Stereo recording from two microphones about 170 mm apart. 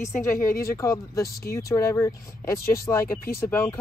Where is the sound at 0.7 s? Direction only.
15° left (ahead or behind).